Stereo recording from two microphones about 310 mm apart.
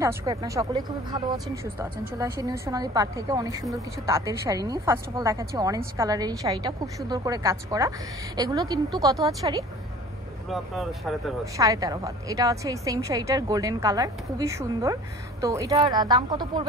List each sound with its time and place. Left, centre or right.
0.0 s speech: centre
10.5 s speech: centre
11.5 s speech: centre